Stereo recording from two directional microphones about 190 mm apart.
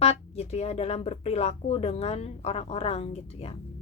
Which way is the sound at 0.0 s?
30° left (ahead or behind).